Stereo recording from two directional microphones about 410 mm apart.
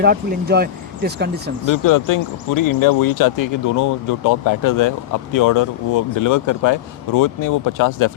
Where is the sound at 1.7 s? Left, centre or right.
Left.